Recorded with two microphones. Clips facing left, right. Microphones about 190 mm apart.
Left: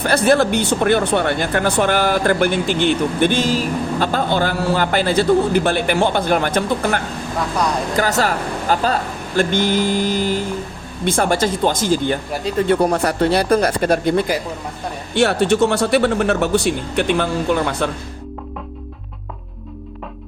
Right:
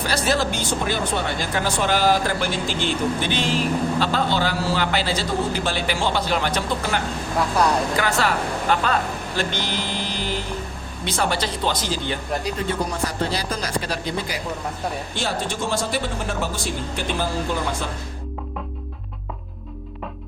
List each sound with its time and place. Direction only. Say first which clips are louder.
0.0 s speech: left 7 dB; 55° left (ahead or behind)
7.9 s speech: left 4 dB; 40° left (ahead or behind)
12.6 s speech: left 9 dB; 65° left (ahead or behind)
15.1 s speech: left 11 dB; 65° left (ahead or behind)